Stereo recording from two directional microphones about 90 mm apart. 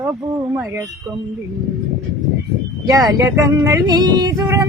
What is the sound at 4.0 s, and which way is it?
Humming, 50° right (ahead or behind).